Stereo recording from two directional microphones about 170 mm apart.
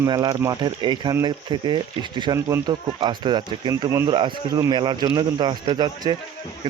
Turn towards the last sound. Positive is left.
turn(degrees=-25)  # may be behind; listen again after turning